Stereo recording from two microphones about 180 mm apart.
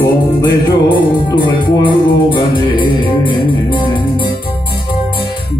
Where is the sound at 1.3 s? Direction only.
25° left (ahead or behind).